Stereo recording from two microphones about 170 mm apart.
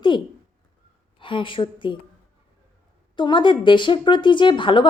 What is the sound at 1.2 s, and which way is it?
Speech, 30° left (ahead or behind).